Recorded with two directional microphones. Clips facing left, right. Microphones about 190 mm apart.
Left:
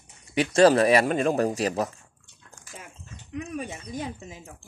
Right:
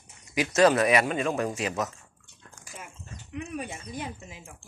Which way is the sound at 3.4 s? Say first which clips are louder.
Left 2 dB; 40° left (ahead or behind).